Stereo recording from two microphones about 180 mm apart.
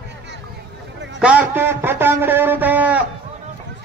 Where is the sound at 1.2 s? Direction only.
5° right (ahead or behind).